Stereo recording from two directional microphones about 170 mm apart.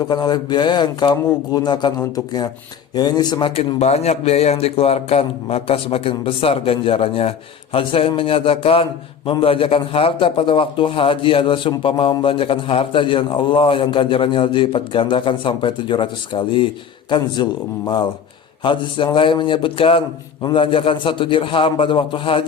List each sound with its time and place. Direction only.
0.0 s a man's voice: 25° left (ahead or behind)